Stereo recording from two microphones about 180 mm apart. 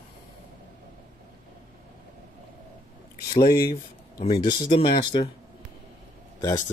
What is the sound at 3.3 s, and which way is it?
Speech, 55° left (ahead or behind).